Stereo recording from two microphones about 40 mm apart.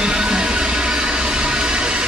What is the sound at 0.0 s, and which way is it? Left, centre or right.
Music, right.